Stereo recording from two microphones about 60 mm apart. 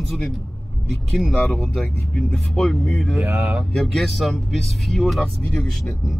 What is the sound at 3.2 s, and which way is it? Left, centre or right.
Speech, right.